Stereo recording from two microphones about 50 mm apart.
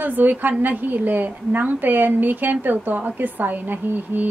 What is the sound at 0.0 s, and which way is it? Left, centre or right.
A woman's voice, right.